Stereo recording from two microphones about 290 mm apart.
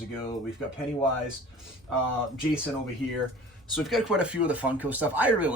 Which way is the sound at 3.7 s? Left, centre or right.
Centre.